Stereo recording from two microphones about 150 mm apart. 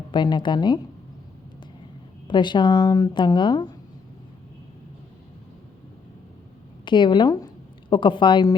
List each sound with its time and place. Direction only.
0.1 s a woman's voice: 30° left (ahead or behind)
2.2 s speech: 30° left (ahead or behind)
6.8 s a woman's voice: 30° left (ahead or behind)